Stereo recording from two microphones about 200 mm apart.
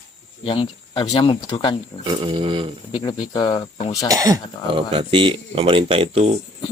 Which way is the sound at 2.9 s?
25° left (ahead or behind).